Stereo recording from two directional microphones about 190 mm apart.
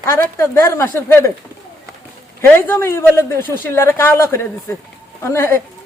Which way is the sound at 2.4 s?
10° left (ahead or behind).